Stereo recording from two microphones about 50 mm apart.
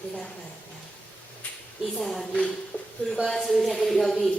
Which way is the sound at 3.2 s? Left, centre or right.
Centre.